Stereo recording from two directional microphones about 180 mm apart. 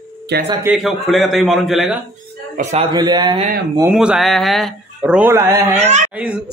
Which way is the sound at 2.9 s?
25° right (ahead or behind).